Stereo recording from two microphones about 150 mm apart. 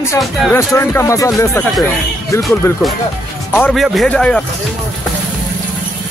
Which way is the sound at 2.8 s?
Centre (ahead or behind).